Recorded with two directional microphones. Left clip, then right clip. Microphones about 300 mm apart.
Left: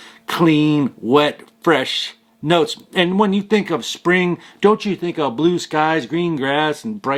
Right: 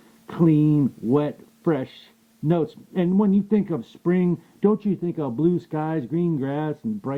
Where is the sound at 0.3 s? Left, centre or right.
Centre.